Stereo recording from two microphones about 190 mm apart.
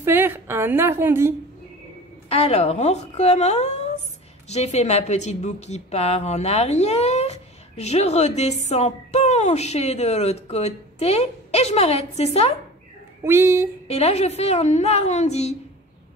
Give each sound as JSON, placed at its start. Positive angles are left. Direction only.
{"t": 0.0, "sound": "a woman's voice", "side_deg": -10}
{"t": 2.2, "sound": "a woman's voice", "side_deg": 30}
{"t": 13.2, "sound": "speech", "side_deg": -15}
{"t": 13.8, "sound": "a woman's voice", "side_deg": 35}